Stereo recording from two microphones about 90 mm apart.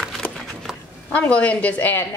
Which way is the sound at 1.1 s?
15° left (ahead or behind).